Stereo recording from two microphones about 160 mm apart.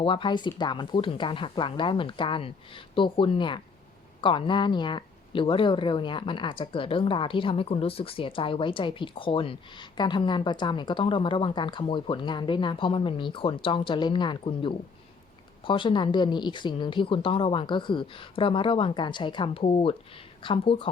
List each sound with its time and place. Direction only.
0.0 s speech: 30° left (ahead or behind)